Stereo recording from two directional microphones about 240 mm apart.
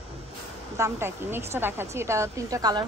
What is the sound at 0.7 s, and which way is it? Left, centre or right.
A woman's voice, centre.